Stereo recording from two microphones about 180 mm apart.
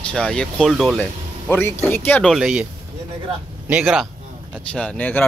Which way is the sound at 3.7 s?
5° right (ahead or behind).